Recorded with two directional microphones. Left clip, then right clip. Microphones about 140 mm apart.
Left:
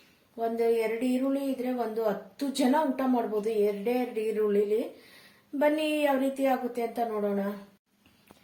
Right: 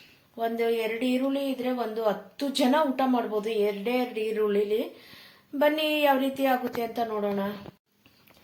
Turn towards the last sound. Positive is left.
turn(degrees=0)  # may be behind; listen again after turning